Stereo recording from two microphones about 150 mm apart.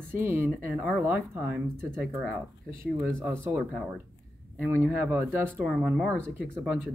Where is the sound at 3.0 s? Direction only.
15° right (ahead or behind).